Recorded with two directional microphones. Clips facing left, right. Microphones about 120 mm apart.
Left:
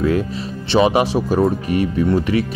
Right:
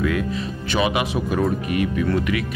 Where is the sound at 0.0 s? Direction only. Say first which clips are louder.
Left 4 dB; 30° left (ahead or behind).